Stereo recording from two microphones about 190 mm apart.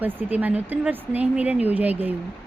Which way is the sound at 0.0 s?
10° right (ahead or behind).